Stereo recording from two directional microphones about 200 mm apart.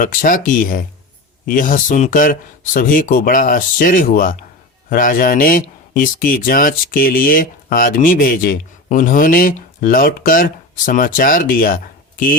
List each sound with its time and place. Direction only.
0.0 s speech: 40° left (ahead or behind)